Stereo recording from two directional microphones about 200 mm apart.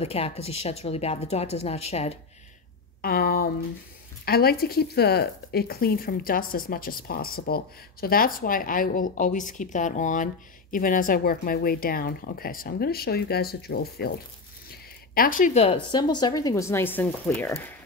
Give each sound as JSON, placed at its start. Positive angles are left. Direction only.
{"t": 0.0, "sound": "speech", "side_deg": 30}
{"t": 3.0, "sound": "speech", "side_deg": 50}